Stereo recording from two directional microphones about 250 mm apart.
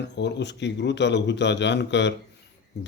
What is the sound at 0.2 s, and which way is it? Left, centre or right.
Speech, left.